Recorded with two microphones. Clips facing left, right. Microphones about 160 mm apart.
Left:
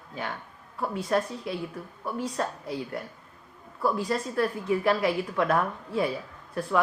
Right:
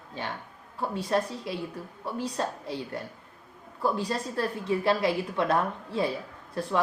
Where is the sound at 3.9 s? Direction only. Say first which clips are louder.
Left 3 dB; 25° right (ahead or behind).